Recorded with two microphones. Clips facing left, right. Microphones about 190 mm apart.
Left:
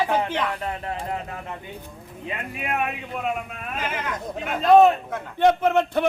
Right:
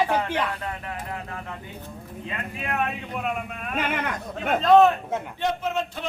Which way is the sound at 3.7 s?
60° right (ahead or behind).